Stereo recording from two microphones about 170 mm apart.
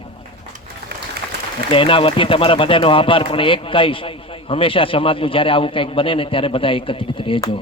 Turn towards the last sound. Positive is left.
turn(degrees=30)  # may be behind; listen again after turning